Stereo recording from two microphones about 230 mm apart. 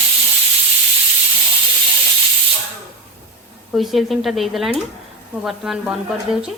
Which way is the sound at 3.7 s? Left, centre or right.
Centre.